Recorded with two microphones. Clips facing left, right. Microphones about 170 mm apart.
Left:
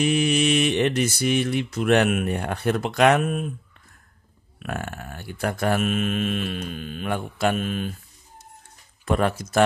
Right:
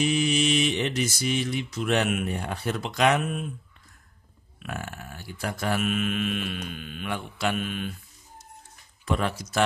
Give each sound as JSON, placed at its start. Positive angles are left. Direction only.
{"t": 0.0, "sound": "mantra", "side_deg": 60}
{"t": 4.6, "sound": "mantra", "side_deg": 55}
{"t": 9.0, "sound": "mantra", "side_deg": 50}